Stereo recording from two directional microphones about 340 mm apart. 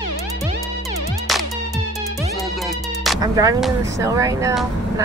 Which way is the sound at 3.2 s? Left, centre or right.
Centre.